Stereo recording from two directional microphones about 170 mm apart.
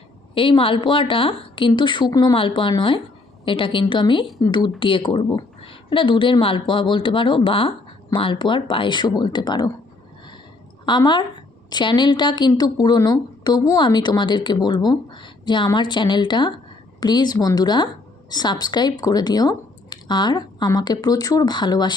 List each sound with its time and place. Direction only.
0.3 s a woman's voice: 30° left (ahead or behind)
10.8 s a woman's voice: 25° left (ahead or behind)